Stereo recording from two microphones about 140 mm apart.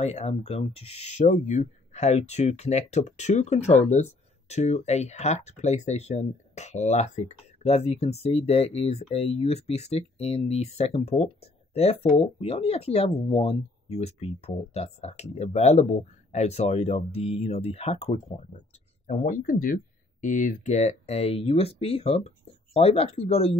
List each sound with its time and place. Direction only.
0.0 s speech: 50° left (ahead or behind)
19.0 s speech: 65° left (ahead or behind); by 23.6 s 45° left (ahead or behind)